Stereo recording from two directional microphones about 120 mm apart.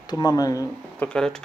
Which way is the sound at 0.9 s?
10° left (ahead or behind).